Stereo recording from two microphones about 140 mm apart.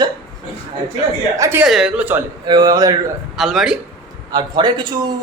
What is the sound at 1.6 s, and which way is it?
Speech, 5° right (ahead or behind).